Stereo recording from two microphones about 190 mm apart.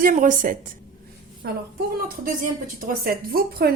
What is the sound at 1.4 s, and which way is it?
Speech, 60° right (ahead or behind).